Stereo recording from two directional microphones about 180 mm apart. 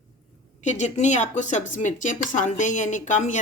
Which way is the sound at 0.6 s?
40° left (ahead or behind).